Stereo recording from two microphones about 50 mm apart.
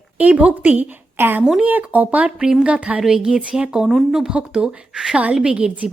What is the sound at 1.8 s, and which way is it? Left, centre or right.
A woman's voice, right.